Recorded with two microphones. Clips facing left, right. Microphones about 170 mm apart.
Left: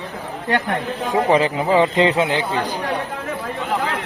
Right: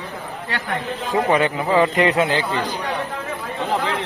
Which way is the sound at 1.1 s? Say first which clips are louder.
Left 2 dB; 30° left (ahead or behind).